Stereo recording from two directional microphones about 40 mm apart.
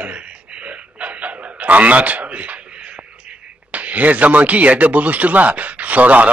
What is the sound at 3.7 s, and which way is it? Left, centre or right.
Speech, right.